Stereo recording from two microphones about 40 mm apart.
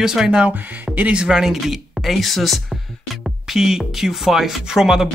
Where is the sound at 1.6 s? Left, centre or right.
Centre.